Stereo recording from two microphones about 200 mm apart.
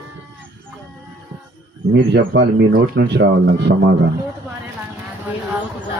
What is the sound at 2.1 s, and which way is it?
A man's voice, 55° right (ahead or behind).